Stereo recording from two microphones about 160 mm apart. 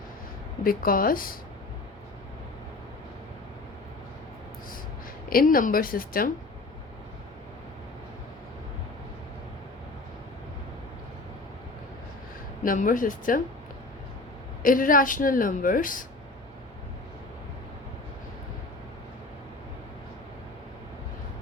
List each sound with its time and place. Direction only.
0.6 s speech: 65° left (ahead or behind)
5.3 s speech: 65° left (ahead or behind)
12.6 s speech: 55° left (ahead or behind)
14.6 s speech: 60° left (ahead or behind)